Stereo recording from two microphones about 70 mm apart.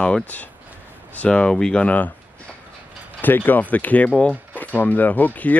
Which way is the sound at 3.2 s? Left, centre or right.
Left.